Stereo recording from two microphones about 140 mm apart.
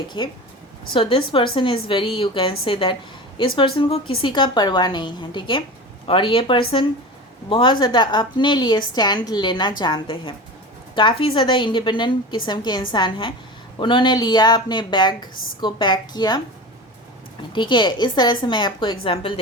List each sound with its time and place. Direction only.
0.2 s a woman's voice: 35° left (ahead or behind)
17.5 s a woman's voice: 35° left (ahead or behind)